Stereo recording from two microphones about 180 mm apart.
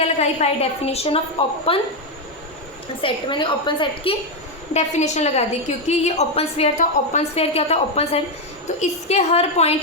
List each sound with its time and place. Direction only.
0.0 s a woman's voice: 35° left (ahead or behind)
3.0 s a woman's voice: 25° left (ahead or behind)
4.7 s a woman's voice: 40° left (ahead or behind)